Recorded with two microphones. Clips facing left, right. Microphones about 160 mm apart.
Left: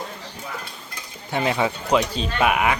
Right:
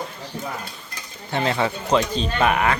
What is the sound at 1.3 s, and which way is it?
Speech, 10° left (ahead or behind).